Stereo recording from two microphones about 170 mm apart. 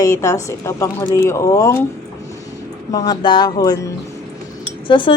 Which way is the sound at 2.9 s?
25° left (ahead or behind).